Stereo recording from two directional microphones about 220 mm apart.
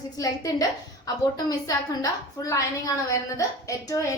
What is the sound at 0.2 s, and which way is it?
A woman's voice, 15° left (ahead or behind).